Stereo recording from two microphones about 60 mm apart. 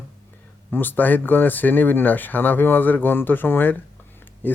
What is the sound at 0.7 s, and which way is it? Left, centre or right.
Speech, left.